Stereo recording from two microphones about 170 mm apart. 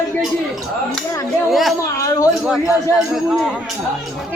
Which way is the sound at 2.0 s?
20° left (ahead or behind).